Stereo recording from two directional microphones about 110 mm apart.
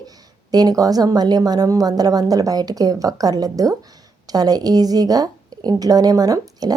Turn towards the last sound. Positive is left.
turn(degrees=-35)  # may be behind; listen again after turning